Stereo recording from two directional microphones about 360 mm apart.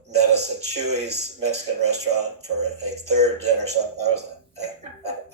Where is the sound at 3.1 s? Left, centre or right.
Centre.